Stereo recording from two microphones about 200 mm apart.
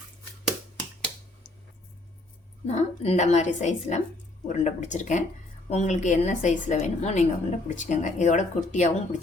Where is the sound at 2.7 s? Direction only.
35° left (ahead or behind).